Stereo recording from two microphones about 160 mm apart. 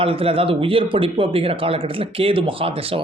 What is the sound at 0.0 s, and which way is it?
Speech, 35° right (ahead or behind).